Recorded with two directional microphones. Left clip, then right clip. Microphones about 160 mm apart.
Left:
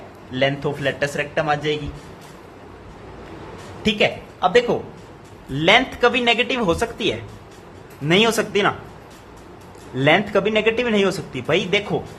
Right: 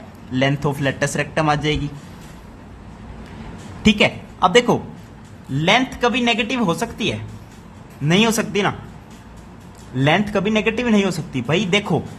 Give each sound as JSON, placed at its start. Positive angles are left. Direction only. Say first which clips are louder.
{"t": 0.3, "sound": "a man's voice", "louder": "right 1 dB", "side_deg": -25}
{"t": 3.8, "sound": "a man's voice", "louder": "right 2 dB", "side_deg": -25}
{"t": 5.5, "sound": "speech", "louder": "left 1 dB", "side_deg": -15}
{"t": 10.0, "sound": "speech", "louder": "left 2 dB", "side_deg": -15}